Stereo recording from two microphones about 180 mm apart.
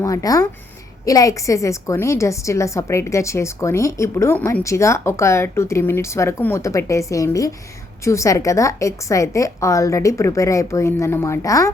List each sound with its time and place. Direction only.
0.0 s a woman's voice: 20° left (ahead or behind)